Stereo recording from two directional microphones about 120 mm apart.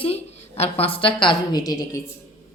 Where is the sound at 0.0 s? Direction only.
60° left (ahead or behind); by 2.0 s 30° left (ahead or behind).